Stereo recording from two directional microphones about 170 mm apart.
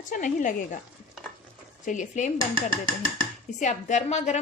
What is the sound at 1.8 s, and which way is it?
A woman's voice, 50° left (ahead or behind).